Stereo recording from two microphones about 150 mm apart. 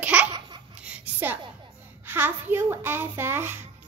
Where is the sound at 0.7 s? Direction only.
10° right (ahead or behind).